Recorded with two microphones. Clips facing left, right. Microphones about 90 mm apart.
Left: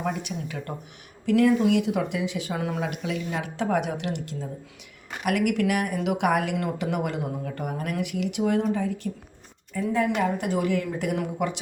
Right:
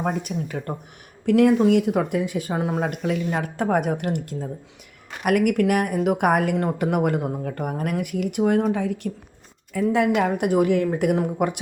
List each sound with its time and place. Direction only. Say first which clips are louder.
0.0 s speech: right 4 dB; 45° right (ahead or behind)
1.2 s a woman's voice: right 4 dB; 55° right (ahead or behind)
2.6 s speech: right 5 dB; 30° right (ahead or behind)
2.8 s a woman's voice: right 5 dB; 50° right (ahead or behind)